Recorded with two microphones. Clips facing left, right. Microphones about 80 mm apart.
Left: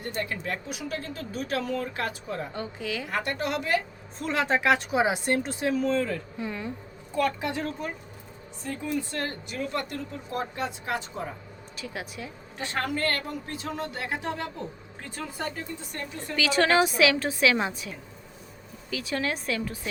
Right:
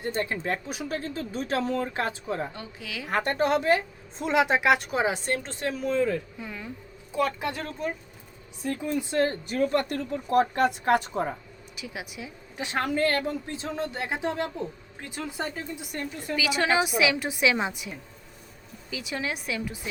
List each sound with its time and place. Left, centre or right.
0.0 s speech: right
2.5 s a woman's voice: centre
3.1 s speech: right
3.3 s a woman's voice: right
4.2 s a woman's voice: centre
4.9 s a woman's voice: centre
5.8 s a woman's voice: centre
6.4 s a woman's voice: centre
8.6 s speech: centre
9.5 s speech: right
11.8 s a woman's voice: centre